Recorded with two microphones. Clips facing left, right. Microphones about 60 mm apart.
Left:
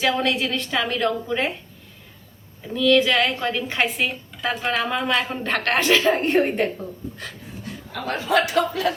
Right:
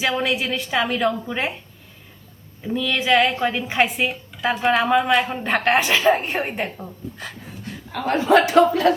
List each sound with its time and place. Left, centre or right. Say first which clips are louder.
0.0 s a woman's voice: even; centre
2.6 s a woman's voice: left 3 dB; centre
7.9 s a man's voice: right 5 dB; right